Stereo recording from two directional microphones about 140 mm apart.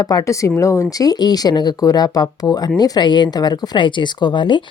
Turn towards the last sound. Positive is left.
turn(degrees=35)  # may be behind; listen again after turning